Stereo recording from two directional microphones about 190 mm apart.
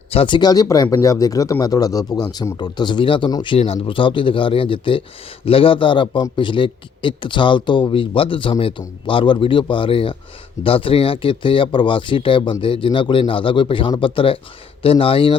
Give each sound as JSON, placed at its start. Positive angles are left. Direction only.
{"t": 0.1, "sound": "speech", "side_deg": 30}